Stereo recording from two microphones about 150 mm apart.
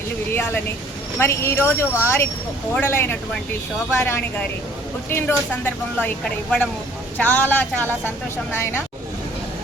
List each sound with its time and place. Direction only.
0.3 s a woman's voice: 15° left (ahead or behind)